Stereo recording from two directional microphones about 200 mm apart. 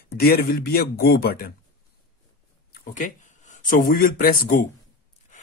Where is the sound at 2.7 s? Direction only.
40° left (ahead or behind).